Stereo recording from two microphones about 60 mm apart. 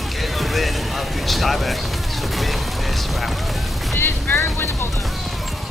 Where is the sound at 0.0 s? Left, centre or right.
Centre.